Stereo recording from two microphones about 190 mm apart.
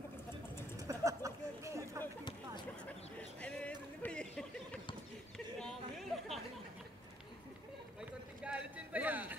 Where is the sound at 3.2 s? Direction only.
5° left (ahead or behind).